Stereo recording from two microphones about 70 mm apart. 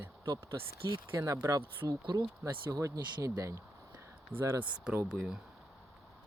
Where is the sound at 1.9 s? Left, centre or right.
Right.